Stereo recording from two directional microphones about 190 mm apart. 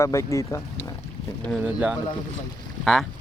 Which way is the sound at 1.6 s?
5° right (ahead or behind).